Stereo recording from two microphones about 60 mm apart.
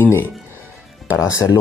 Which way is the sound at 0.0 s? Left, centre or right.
Left.